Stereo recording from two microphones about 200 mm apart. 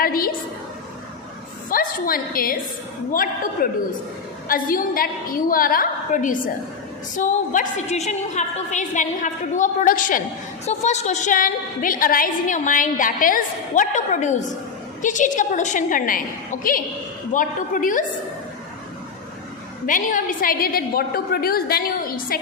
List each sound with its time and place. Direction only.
0.0 s a sound: 45° left (ahead or behind)
1.7 s a woman's voice: 45° left (ahead or behind)
19.9 s a woman's voice: 40° left (ahead or behind)